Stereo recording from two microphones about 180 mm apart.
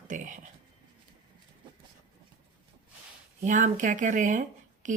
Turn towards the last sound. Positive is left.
turn(degrees=-45)  # may be behind; listen again after turning